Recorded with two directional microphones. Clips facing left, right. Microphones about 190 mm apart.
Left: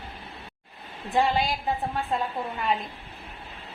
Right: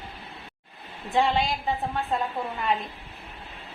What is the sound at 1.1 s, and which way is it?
A woman's voice, centre (ahead or behind).